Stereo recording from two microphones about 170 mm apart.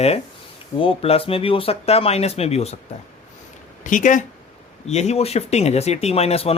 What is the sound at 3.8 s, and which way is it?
Speech, 50° left (ahead or behind).